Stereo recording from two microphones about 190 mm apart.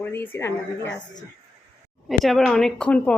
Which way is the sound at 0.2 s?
10° left (ahead or behind).